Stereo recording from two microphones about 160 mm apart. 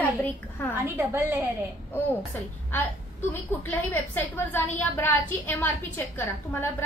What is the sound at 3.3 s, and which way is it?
A woman's voice, 15° left (ahead or behind).